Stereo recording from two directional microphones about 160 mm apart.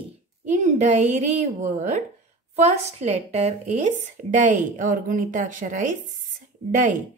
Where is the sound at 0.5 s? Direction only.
50° right (ahead or behind).